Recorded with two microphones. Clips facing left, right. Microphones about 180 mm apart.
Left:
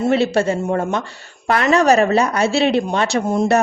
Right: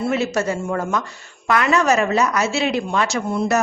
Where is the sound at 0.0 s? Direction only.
30° left (ahead or behind).